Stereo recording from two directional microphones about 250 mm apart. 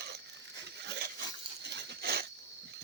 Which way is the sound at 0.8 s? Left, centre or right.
Right.